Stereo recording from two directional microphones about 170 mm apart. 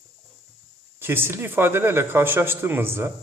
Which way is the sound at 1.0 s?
15° right (ahead or behind).